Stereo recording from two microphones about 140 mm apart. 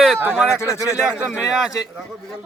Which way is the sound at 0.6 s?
20° left (ahead or behind).